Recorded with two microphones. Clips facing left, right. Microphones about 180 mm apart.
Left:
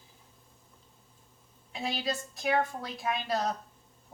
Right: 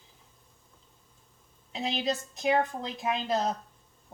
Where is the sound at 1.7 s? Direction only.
20° right (ahead or behind).